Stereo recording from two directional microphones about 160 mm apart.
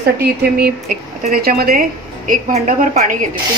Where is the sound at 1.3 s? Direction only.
75° right (ahead or behind).